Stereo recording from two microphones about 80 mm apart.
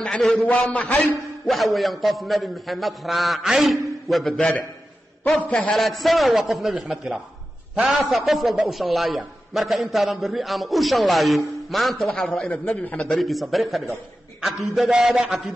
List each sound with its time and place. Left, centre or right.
0.2 s a man's voice: centre
0.5 s a man's voice: centre
1.5 s a man's voice: centre
4.3 s a man's voice: centre
5.8 s a man's voice: centre
13.2 s a man's voice: centre